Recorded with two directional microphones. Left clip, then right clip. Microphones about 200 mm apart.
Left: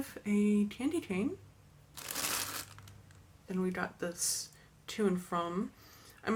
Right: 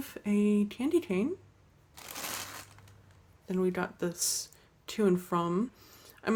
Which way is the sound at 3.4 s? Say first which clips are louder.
Right 5 dB; 40° right (ahead or behind).